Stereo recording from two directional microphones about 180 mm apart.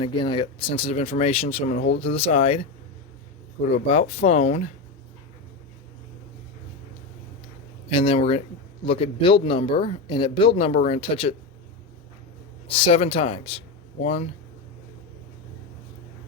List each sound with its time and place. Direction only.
0.0 s speech: 25° left (ahead or behind)
3.7 s speech: 35° left (ahead or behind)
7.9 s speech: 30° left (ahead or behind)
12.6 s speech: 30° left (ahead or behind)